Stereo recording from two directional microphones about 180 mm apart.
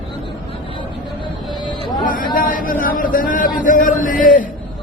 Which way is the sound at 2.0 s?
50° left (ahead or behind).